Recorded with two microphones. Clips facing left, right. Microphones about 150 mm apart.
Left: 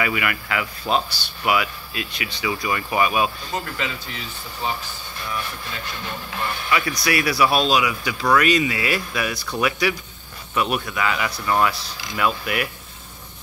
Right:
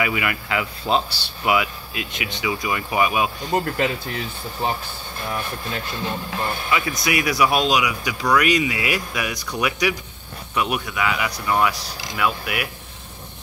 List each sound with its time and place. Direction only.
0.0 s speech: 20° right (ahead or behind)
3.5 s speech: 55° right (ahead or behind)
6.7 s speech: 20° right (ahead or behind)